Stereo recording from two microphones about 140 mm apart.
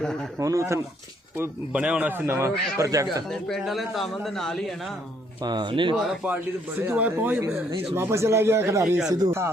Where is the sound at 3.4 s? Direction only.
Centre (ahead or behind).